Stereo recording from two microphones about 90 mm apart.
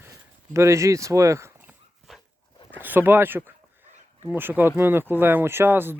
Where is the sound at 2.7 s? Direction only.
20° right (ahead or behind).